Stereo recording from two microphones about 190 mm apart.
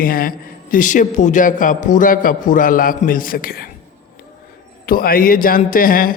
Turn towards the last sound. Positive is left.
turn(degrees=50)  # may be behind; listen again after turning